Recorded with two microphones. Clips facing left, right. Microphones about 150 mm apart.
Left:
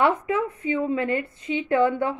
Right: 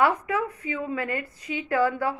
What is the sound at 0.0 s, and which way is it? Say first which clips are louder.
Speech: left 2 dB; 25° left (ahead or behind).